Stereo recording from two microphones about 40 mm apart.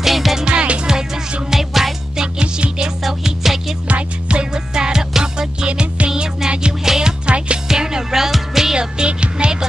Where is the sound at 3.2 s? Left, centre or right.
Centre.